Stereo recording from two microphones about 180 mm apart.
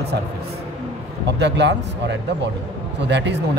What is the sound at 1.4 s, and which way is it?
Speech, 70° right (ahead or behind).